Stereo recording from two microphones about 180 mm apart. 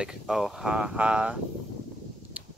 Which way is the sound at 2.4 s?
10° right (ahead or behind).